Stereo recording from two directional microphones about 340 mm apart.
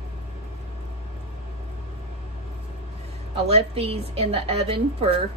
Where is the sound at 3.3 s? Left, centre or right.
Centre.